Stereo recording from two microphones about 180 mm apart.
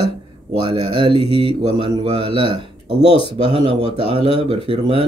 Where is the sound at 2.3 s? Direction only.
30° left (ahead or behind).